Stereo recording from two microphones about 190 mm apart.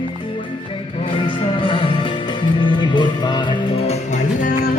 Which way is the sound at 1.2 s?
25° left (ahead or behind).